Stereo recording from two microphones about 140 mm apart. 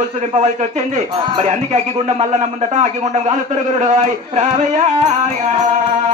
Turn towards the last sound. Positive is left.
turn(degrees=-55)  # may be behind; listen again after turning